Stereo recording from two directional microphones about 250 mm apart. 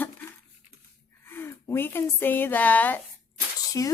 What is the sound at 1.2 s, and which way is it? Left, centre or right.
A woman's voice, centre.